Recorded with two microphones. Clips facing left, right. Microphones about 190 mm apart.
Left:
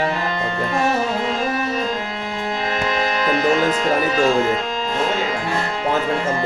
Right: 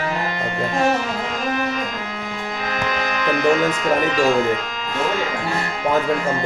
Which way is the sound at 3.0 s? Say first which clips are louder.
Even; 30° left (ahead or behind).